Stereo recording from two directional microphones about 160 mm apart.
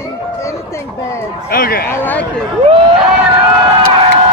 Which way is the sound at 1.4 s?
70° left (ahead or behind).